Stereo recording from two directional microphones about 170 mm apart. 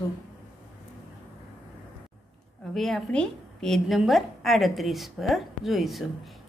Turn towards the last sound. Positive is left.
turn(degrees=0)  # may be behind; listen again after turning